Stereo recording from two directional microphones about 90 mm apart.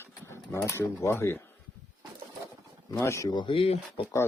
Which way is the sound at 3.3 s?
70° left (ahead or behind).